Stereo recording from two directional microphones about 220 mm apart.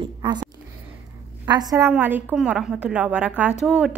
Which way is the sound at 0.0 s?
20° right (ahead or behind).